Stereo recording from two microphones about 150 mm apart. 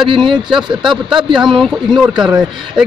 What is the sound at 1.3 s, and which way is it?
A man's voice, 5° right (ahead or behind).